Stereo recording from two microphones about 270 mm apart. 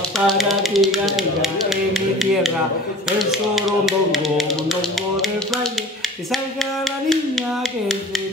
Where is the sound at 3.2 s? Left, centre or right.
Centre.